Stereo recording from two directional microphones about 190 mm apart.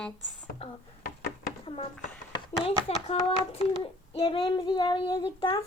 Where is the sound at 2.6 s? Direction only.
35° left (ahead or behind).